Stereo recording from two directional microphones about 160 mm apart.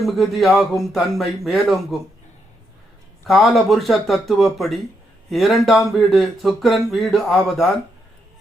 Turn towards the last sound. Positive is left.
turn(degrees=0)  # may be behind; listen again after turning